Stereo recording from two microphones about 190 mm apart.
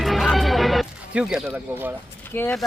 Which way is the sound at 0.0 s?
Centre (ahead or behind).